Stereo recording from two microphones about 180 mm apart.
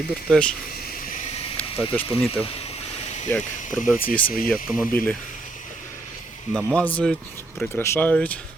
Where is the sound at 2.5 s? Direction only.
35° left (ahead or behind).